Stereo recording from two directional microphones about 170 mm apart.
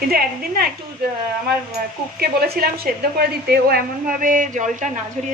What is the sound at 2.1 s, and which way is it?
A woman's voice, 65° right (ahead or behind).